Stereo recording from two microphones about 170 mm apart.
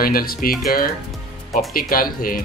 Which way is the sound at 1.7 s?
55° left (ahead or behind).